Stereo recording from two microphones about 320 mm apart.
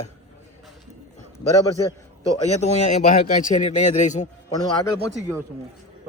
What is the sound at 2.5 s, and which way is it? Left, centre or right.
A man's voice, left.